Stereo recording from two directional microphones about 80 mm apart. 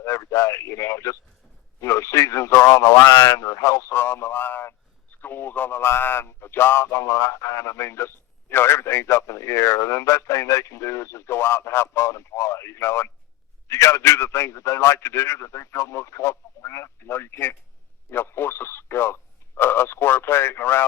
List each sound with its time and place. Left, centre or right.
0.0 s speech: left
3.3 s speech: left
3.9 s speech: left